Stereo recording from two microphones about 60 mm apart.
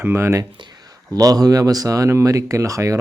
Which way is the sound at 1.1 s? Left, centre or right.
Right.